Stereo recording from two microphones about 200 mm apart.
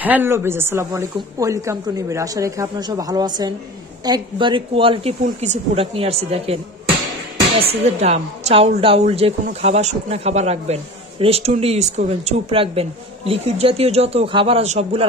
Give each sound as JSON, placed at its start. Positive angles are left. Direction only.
{"t": 0.0, "sound": "a woman's voice", "side_deg": -10}